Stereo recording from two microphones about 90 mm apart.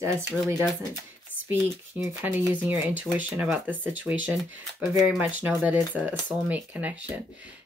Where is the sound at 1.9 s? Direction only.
20° right (ahead or behind).